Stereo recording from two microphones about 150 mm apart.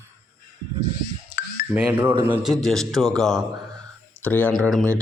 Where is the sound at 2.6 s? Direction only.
Centre (ahead or behind).